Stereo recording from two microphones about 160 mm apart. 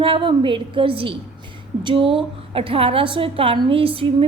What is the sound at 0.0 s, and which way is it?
A woman's voice, 30° right (ahead or behind).